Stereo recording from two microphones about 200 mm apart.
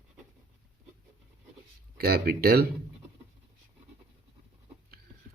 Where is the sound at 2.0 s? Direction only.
50° right (ahead or behind).